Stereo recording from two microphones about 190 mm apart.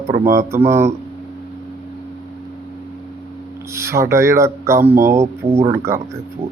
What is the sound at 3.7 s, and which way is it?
Speech, 15° right (ahead or behind).